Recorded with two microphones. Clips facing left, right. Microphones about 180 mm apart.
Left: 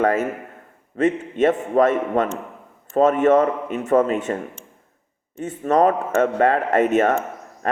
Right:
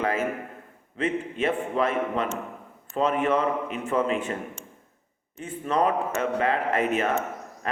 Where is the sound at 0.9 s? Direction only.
45° left (ahead or behind).